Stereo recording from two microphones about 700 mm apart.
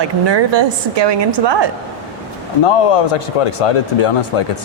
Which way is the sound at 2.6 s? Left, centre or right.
Left.